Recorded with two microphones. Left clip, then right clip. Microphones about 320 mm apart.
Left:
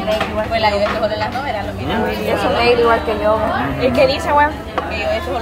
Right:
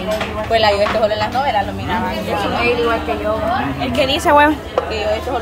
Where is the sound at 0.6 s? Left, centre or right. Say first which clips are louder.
Right 3 dB; right.